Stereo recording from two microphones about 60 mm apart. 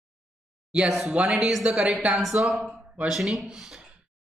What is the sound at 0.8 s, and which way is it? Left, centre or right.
Speech, centre.